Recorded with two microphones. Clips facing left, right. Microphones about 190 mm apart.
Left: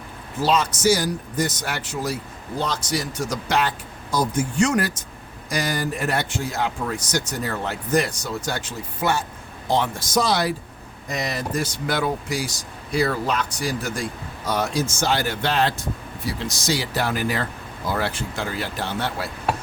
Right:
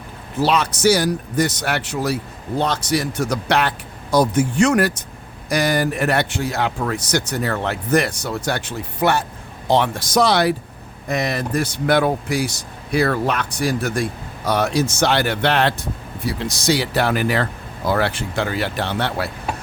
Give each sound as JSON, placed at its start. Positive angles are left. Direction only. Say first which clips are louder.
{"t": 0.3, "sound": "speech", "louder": "right 2 dB", "side_deg": -70}